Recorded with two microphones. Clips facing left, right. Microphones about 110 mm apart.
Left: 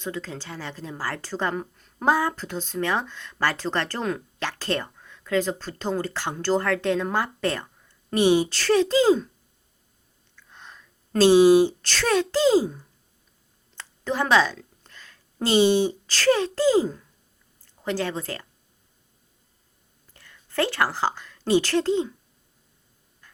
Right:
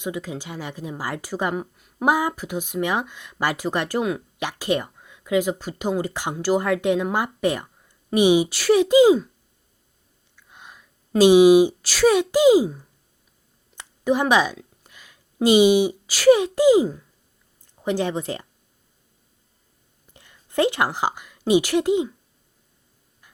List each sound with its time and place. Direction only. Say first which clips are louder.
0.0 s a woman's voice: right 3 dB; 15° right (ahead or behind)
10.3 s a woman's voice: right 1 dB; 10° right (ahead or behind)
20.1 s a woman's voice: right 4 dB; 20° right (ahead or behind)